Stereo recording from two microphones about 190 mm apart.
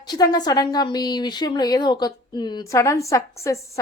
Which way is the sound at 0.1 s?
20° left (ahead or behind).